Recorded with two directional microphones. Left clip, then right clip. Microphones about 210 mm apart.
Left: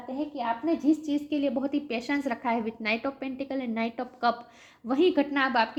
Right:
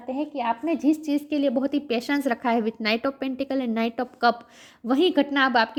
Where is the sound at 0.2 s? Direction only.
50° right (ahead or behind).